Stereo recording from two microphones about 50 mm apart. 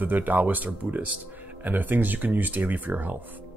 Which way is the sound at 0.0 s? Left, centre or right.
Right.